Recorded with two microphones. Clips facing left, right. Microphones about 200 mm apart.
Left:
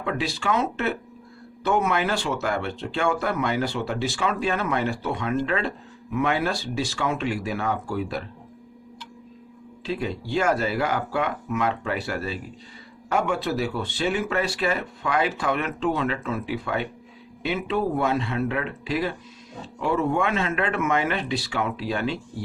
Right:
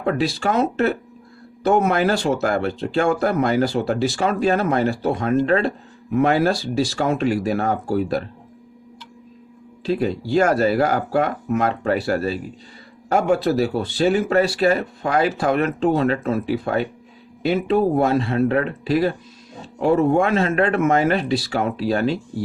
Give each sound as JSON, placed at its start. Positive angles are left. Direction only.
{"t": 0.0, "sound": "speech", "side_deg": -40}
{"t": 9.8, "sound": "speech", "side_deg": -40}